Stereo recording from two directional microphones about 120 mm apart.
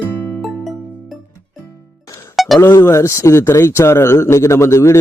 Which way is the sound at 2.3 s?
Centre (ahead or behind).